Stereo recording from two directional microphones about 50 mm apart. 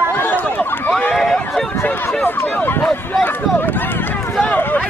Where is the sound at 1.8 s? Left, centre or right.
Left.